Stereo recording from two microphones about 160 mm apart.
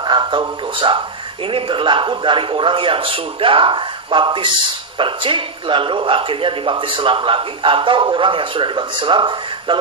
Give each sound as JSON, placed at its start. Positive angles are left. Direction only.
{"t": 0.0, "sound": "speech", "side_deg": -30}